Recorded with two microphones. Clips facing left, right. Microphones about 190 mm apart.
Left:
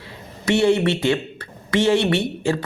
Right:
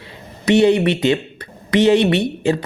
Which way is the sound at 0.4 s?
20° right (ahead or behind).